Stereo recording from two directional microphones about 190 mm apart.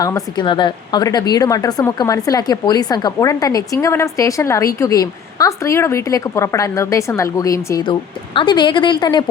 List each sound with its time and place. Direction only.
0.0 s a woman's voice: 20° left (ahead or behind)